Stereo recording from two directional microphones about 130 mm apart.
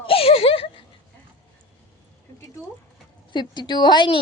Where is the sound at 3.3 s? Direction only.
35° left (ahead or behind).